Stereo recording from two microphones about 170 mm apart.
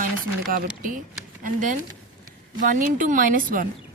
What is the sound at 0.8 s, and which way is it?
Speech, 50° right (ahead or behind).